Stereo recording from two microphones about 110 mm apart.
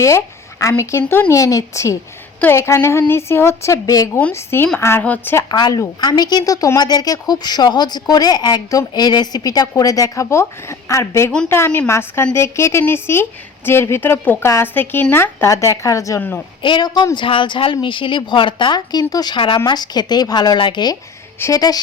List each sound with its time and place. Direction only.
0.6 s a woman's voice: 25° left (ahead or behind)
1.4 s a woman's voice: 30° left (ahead or behind)
5.5 s a woman's voice: 40° left (ahead or behind)
16.6 s speech: 45° left (ahead or behind)
21.3 s speech: 25° left (ahead or behind)